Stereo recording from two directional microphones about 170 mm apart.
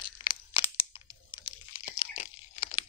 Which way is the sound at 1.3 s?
30° left (ahead or behind).